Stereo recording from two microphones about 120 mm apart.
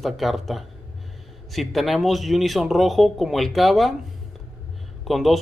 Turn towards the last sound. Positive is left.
turn(degrees=0)  # may be behind; listen again after turning